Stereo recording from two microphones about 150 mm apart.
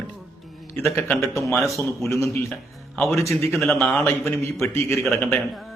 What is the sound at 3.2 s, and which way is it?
Speech, 20° left (ahead or behind).